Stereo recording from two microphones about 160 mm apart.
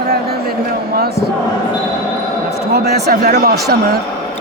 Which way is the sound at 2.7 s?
90° right.